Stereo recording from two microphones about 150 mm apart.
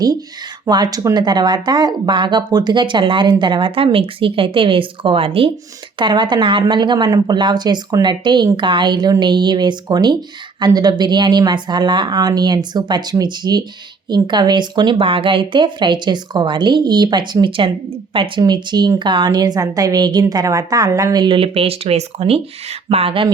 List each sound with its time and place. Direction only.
0.6 s speech: 25° right (ahead or behind)